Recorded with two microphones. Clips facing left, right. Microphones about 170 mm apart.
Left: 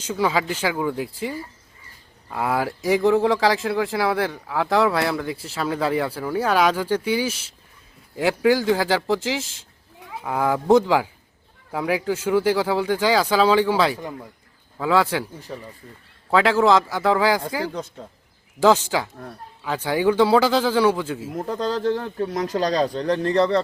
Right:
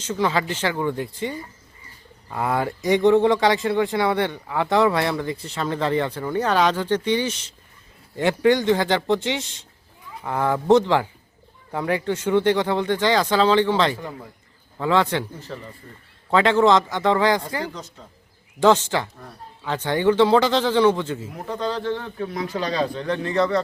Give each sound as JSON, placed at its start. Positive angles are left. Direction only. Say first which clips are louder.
{"t": 0.0, "sound": "speech", "louder": "even", "side_deg": 10}
{"t": 21.3, "sound": "speech", "louder": "left 3 dB", "side_deg": 40}